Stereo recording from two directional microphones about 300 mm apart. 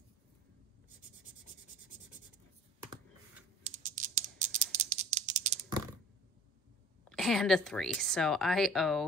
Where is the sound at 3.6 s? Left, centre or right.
Right.